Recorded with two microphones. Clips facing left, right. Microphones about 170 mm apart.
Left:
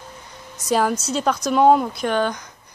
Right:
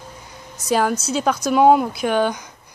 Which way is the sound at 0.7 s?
Centre (ahead or behind).